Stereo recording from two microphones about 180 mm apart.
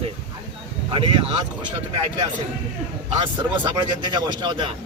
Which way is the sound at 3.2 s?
25° right (ahead or behind).